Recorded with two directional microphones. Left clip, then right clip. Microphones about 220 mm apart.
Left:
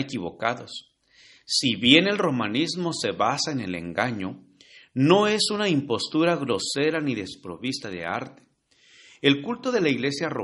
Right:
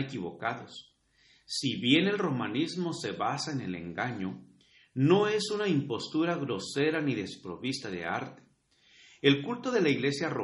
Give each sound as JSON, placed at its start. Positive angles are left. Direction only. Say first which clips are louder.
{"t": 0.0, "sound": "a man's voice", "louder": "left 7 dB", "side_deg": 40}